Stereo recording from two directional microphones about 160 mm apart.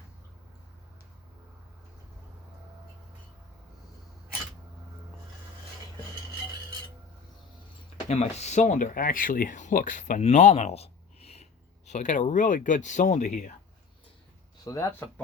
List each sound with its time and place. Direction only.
8.0 s speech: 45° left (ahead or behind)
14.6 s speech: 20° left (ahead or behind)